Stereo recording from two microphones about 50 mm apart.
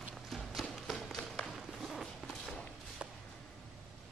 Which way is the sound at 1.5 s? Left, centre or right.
Centre.